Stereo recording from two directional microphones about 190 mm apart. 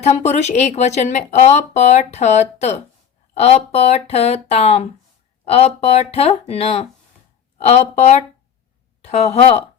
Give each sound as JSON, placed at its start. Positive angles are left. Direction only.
{"t": 0.0, "sound": "speech", "side_deg": 35}